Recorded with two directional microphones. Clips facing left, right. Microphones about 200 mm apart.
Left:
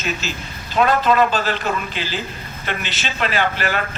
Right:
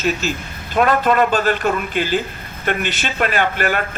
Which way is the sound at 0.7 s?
50° right (ahead or behind).